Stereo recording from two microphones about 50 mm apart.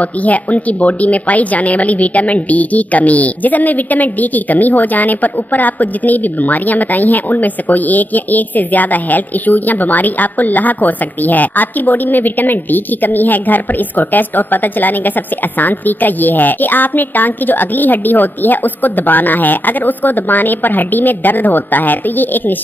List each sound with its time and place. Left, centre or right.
0.2 s a woman's voice: left